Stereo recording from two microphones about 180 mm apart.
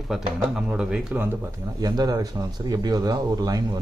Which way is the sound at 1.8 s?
20° right (ahead or behind).